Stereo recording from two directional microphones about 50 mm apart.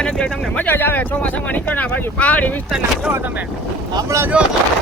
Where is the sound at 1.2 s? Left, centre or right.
Left.